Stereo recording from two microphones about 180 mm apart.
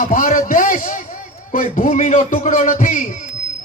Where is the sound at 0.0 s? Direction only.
45° left (ahead or behind).